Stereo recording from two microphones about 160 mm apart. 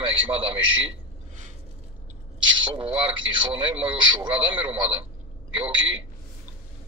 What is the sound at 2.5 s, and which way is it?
A man's voice, 35° right (ahead or behind).